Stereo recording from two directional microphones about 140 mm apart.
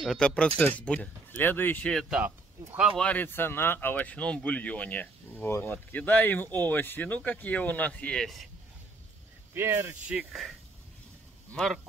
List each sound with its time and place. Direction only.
0.0 s speech: 5° left (ahead or behind)
2.0 s speech: 10° right (ahead or behind)
3.0 s speech: 10° left (ahead or behind)
9.5 s speech: 20° right (ahead or behind)
10.0 s speech: 10° right (ahead or behind)
11.5 s speech: 5° left (ahead or behind)